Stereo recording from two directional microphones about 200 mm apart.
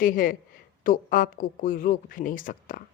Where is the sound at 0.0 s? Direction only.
45° left (ahead or behind).